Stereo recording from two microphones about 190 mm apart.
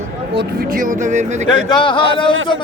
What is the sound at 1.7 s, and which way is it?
Speech, 25° left (ahead or behind).